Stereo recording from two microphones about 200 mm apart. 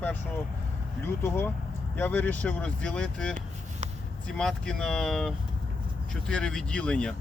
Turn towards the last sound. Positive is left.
turn(degrees=5)  # may be behind; listen again after turning